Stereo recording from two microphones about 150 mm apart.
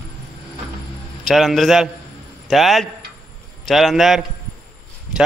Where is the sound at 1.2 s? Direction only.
Centre (ahead or behind).